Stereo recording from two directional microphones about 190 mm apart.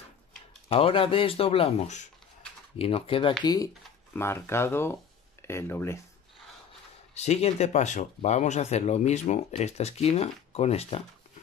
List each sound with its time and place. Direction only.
0.7 s speech: 30° left (ahead or behind)
3.4 s speech: 20° left (ahead or behind)
7.2 s speech: 35° left (ahead or behind)